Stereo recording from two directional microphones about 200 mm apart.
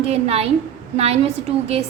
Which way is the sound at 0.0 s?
30° right (ahead or behind).